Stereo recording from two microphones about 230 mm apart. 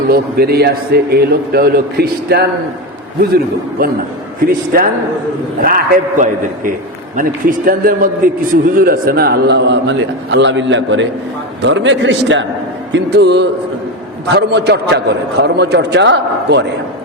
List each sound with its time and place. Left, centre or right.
0.1 s a man's voice: right
4.4 s a man's voice: right